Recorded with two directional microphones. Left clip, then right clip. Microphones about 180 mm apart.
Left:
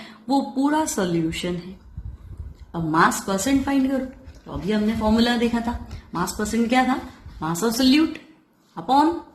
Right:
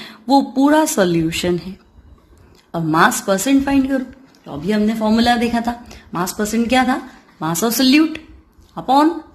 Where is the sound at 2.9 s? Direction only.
40° right (ahead or behind).